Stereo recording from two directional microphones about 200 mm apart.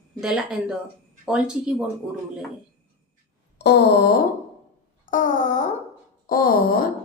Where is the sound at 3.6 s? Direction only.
55° left (ahead or behind).